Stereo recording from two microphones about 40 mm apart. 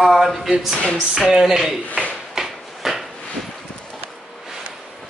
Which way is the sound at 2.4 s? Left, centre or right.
Centre.